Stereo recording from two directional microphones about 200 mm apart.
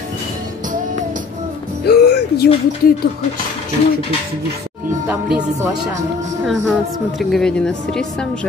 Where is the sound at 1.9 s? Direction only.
55° left (ahead or behind).